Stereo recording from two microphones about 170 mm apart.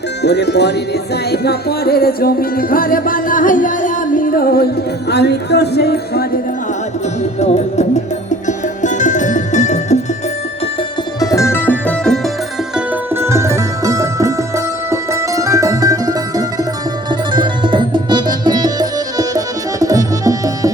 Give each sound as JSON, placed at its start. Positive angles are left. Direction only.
{"t": 0.2, "sound": "music", "side_deg": 80}
{"t": 5.0, "sound": "a man's voice", "side_deg": 80}
{"t": 7.3, "sound": "speech", "side_deg": 40}
{"t": 8.4, "sound": "music", "side_deg": 45}
{"t": 11.2, "sound": "music", "side_deg": 20}
{"t": 12.7, "sound": "music", "side_deg": -15}